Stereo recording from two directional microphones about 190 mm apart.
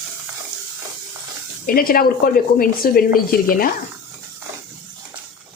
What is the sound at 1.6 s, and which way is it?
Speech, 50° left (ahead or behind).